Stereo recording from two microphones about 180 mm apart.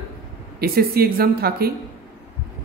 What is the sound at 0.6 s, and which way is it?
A woman's voice, 55° right (ahead or behind).